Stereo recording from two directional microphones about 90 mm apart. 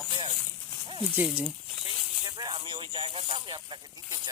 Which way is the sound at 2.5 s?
70° right (ahead or behind).